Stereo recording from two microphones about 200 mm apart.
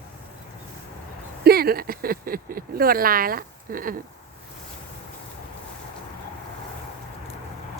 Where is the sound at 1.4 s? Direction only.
50° right (ahead or behind).